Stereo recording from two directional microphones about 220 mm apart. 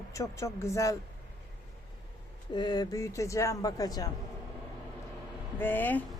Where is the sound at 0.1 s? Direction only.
15° left (ahead or behind).